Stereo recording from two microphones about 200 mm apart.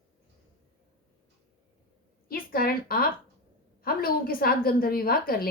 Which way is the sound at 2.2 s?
50° left (ahead or behind).